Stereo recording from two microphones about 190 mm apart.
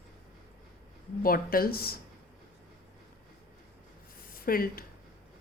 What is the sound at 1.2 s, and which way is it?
Speech, 50° left (ahead or behind).